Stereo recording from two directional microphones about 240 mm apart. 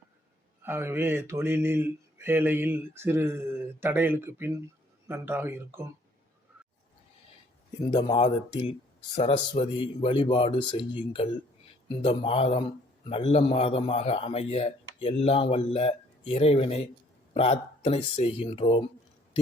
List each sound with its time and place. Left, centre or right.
0.6 s speech: centre
7.9 s a man's voice: left